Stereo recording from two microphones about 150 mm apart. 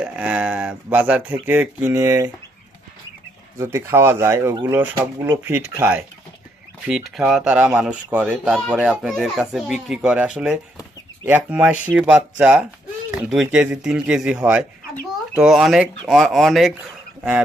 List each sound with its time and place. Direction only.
0.0 s speech: 10° right (ahead or behind)
3.6 s speech: 15° right (ahead or behind)
6.8 s speech: 5° right (ahead or behind)